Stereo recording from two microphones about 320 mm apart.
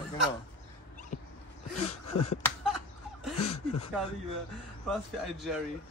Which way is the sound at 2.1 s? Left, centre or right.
Left.